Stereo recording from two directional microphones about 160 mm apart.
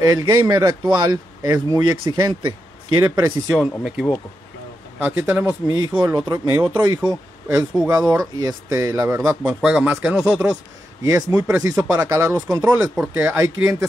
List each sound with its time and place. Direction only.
0.0 s a man's voice: 25° right (ahead or behind)
3.4 s a man's voice: centre (ahead or behind); by 9.4 s 20° right (ahead or behind)
9.4 s speech: 5° right (ahead or behind)
10.2 s a man's voice: 15° right (ahead or behind)
12.9 s speech: 10° right (ahead or behind)